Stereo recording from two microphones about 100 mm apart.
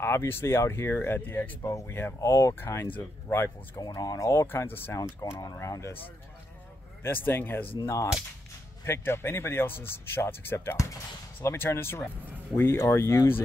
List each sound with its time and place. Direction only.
0.0 s a man's voice: 25° left (ahead or behind)
3.8 s a man's voice: 40° left (ahead or behind)
7.0 s a man's voice: 20° left (ahead or behind)